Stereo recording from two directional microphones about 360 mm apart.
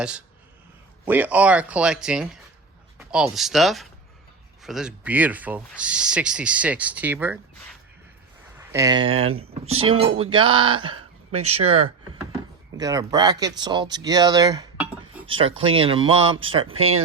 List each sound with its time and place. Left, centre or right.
1.0 s speech: centre